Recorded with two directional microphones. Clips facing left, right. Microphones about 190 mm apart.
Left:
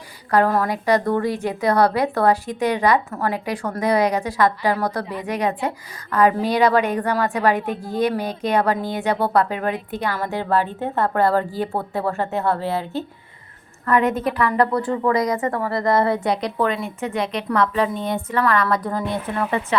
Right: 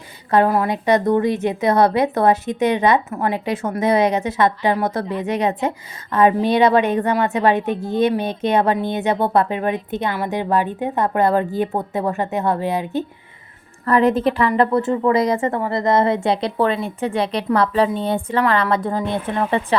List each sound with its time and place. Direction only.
0.4 s speech: 15° right (ahead or behind)
13.8 s speech: 35° right (ahead or behind)